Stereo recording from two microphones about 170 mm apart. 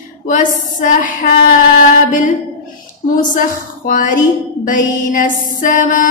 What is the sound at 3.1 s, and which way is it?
A woman's voice, 55° left (ahead or behind).